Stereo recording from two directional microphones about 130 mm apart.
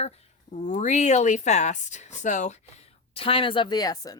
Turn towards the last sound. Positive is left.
turn(degrees=30)  # may be behind; listen again after turning